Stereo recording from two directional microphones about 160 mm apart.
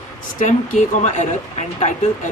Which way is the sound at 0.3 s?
50° left (ahead or behind).